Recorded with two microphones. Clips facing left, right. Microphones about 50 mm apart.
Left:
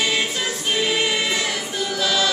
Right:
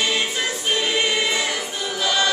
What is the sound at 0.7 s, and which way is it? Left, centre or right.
Choir, centre.